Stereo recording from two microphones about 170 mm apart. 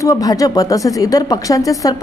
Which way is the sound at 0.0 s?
20° left (ahead or behind).